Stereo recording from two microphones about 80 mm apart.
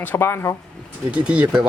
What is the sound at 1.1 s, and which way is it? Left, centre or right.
Speech, centre.